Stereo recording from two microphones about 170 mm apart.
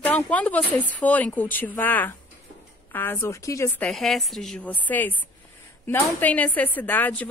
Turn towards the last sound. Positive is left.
turn(degrees=10)  # may be behind; listen again after turning